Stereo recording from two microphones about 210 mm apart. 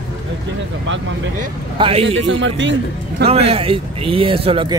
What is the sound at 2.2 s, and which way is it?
Speech, 65° right (ahead or behind).